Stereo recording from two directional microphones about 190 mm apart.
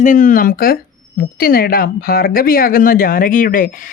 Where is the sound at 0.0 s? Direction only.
45° left (ahead or behind).